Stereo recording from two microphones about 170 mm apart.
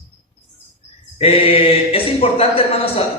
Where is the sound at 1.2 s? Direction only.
35° left (ahead or behind).